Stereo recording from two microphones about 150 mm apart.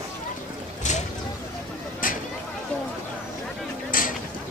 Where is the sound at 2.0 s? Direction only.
65° left (ahead or behind).